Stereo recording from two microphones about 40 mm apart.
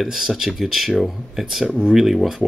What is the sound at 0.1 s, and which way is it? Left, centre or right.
Speech, centre.